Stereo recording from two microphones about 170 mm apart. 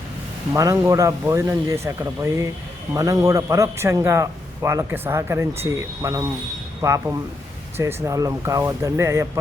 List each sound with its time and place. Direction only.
0.5 s a man's voice: 20° right (ahead or behind)